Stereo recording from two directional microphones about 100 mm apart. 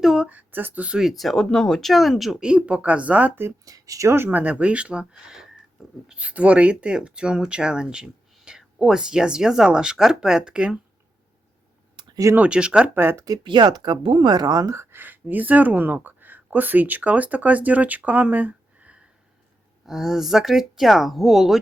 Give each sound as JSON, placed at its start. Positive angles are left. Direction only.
{"t": 0.0, "sound": "a sound", "side_deg": -5}
{"t": 0.3, "sound": "speech", "side_deg": -15}
{"t": 3.7, "sound": "speech", "side_deg": -35}
{"t": 11.9, "sound": "a sound", "side_deg": -45}
{"t": 12.4, "sound": "speech", "side_deg": -10}
{"t": 13.0, "sound": "speech", "side_deg": -25}
{"t": 13.4, "sound": "speech", "side_deg": -50}
{"t": 14.9, "sound": "speech", "side_deg": -20}
{"t": 19.8, "sound": "speech", "side_deg": -5}